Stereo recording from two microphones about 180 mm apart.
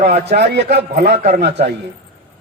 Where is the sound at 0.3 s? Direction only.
70° right (ahead or behind).